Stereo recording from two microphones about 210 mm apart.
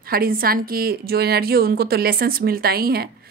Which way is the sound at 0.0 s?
45° right (ahead or behind).